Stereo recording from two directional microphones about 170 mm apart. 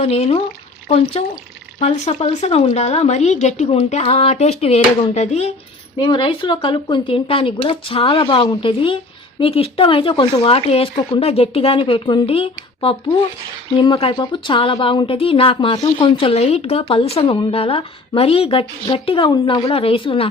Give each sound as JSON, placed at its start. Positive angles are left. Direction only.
{"t": 0.0, "sound": "a woman's voice", "side_deg": 35}
{"t": 1.9, "sound": "a woman's voice", "side_deg": 35}
{"t": 6.0, "sound": "a woman's voice", "side_deg": 30}